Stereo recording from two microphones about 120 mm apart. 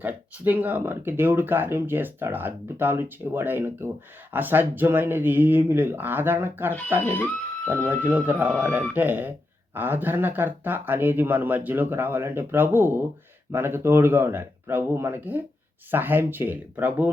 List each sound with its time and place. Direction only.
0.0 s speech: 15° right (ahead or behind)
7.0 s speech: 15° left (ahead or behind)
7.9 s speech: 15° right (ahead or behind)
8.4 s speech: 15° left (ahead or behind)
8.7 s speech: 15° right (ahead or behind)